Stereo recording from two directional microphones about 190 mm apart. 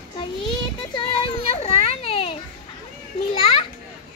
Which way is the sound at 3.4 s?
30° left (ahead or behind).